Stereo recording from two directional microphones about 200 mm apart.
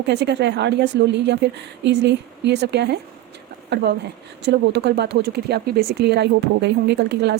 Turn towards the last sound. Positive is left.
turn(degrees=-60)  # may be behind; listen again after turning